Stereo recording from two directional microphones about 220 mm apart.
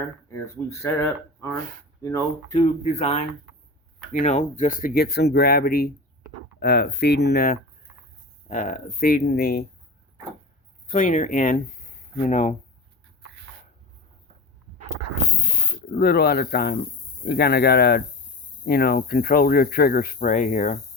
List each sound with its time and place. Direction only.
0.3 s speech: 10° left (ahead or behind)
2.8 s speech: 30° left (ahead or behind); by 9.6 s 45° left (ahead or behind)
10.8 s speech: 35° left (ahead or behind)
15.9 s speech: 45° left (ahead or behind)